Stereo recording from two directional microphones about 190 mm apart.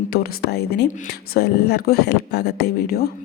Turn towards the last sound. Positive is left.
turn(degrees=55)  # may be behind; listen again after turning